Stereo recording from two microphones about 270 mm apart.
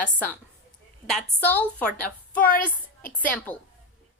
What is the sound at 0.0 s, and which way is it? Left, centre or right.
A woman's voice, centre.